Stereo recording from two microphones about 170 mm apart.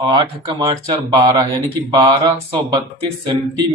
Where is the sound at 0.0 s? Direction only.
25° right (ahead or behind).